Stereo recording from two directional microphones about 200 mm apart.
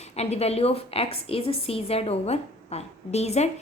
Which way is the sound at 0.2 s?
30° left (ahead or behind).